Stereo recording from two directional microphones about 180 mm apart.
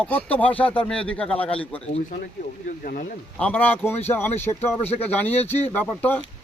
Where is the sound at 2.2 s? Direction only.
55° left (ahead or behind).